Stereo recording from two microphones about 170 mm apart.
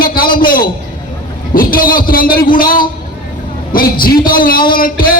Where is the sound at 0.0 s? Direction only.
60° left (ahead or behind).